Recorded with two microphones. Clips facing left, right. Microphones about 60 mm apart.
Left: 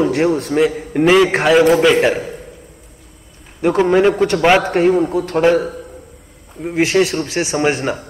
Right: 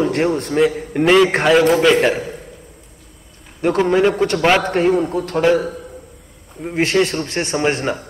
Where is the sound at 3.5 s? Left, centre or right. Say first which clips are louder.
Left 2 dB; centre.